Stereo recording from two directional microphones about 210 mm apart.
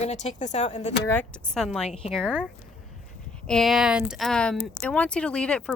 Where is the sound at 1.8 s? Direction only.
30° left (ahead or behind).